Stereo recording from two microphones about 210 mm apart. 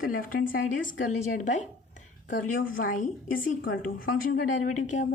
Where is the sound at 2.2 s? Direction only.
40° left (ahead or behind).